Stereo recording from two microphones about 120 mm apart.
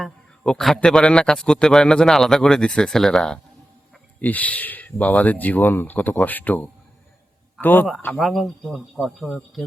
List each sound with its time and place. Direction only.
0.0 s a man's voice: 5° left (ahead or behind)
8.1 s a man's voice: centre (ahead or behind)